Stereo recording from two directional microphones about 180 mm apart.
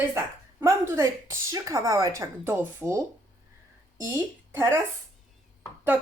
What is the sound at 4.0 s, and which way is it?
Speech, 15° right (ahead or behind).